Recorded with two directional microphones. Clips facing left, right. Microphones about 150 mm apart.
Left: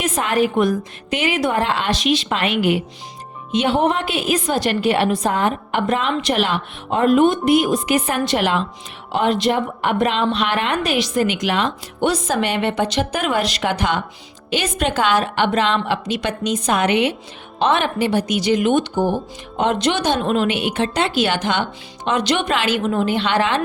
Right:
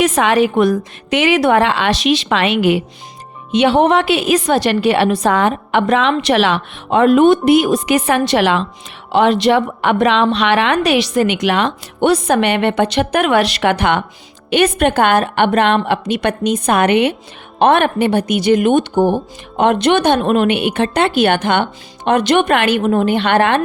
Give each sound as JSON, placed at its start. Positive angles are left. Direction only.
{"t": 0.0, "sound": "a woman's voice", "side_deg": -80}